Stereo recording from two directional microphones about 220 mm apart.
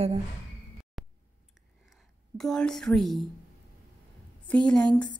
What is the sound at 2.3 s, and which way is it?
Speech, 5° left (ahead or behind).